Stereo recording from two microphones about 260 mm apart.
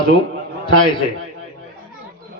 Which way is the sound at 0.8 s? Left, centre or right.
Centre.